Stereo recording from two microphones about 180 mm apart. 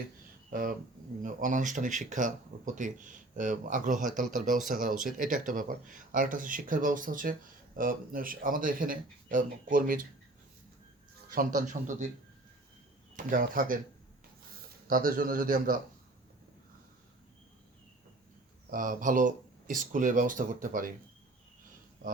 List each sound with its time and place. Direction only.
0.5 s speech: 50° right (ahead or behind)
11.3 s speech: 50° right (ahead or behind)
13.1 s speech: 50° right (ahead or behind)
14.8 s speech: 50° right (ahead or behind)
18.7 s speech: 50° right (ahead or behind)